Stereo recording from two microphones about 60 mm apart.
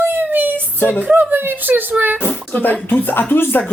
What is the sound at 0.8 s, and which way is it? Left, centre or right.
Speech, left.